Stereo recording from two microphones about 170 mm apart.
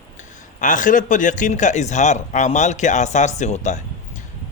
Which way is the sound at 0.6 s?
50° left (ahead or behind).